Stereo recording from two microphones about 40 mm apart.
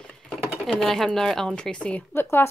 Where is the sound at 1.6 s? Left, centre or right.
Left.